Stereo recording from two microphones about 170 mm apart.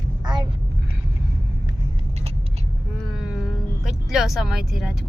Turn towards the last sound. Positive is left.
turn(degrees=0)  # may be behind; listen again after turning